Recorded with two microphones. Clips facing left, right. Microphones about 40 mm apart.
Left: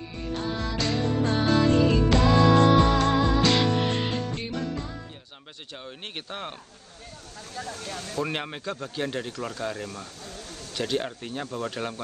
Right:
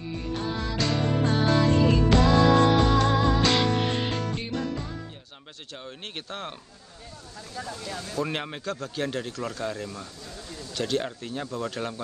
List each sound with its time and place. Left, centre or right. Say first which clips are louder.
0.2 s music: left 2 dB; centre
5.9 s speech: even; centre
7.5 s speech: even; left
8.2 s speech: even; centre
10.7 s speech: even; centre